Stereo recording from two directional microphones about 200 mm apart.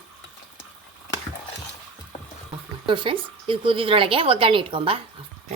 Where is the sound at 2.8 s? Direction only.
25° right (ahead or behind).